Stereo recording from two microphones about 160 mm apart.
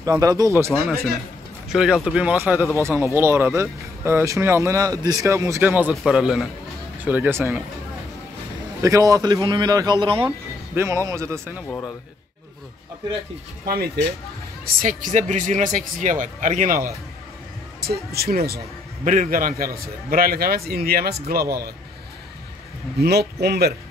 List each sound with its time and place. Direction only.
0.0 s speech: 20° right (ahead or behind)
0.7 s speech: centre (ahead or behind)
8.8 s speech: 20° right (ahead or behind)
10.2 s speech: 15° right (ahead or behind)
14.8 s speech: 55° right (ahead or behind)
17.7 s a man's voice: 80° right
19.0 s a man's voice: 55° right (ahead or behind); by 21.7 s 75° right (ahead or behind)
22.9 s speech: 90° right